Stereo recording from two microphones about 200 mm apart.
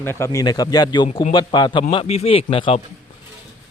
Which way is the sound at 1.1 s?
35° left (ahead or behind).